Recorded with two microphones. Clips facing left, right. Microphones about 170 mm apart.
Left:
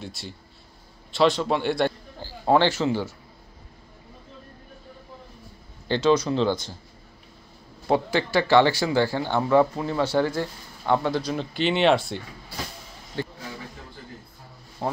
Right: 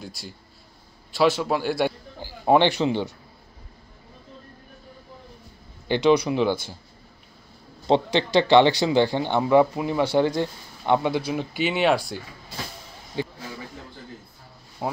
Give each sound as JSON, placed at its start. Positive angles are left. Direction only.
{"t": 0.0, "sound": "a man's voice", "side_deg": 0}
{"t": 5.9, "sound": "speech", "side_deg": -15}
{"t": 7.8, "sound": "speech", "side_deg": -20}
{"t": 14.8, "sound": "speech", "side_deg": -10}